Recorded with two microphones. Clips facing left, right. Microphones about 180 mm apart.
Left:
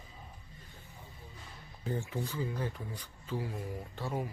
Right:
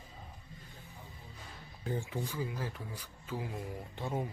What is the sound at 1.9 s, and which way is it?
Speech, 15° right (ahead or behind).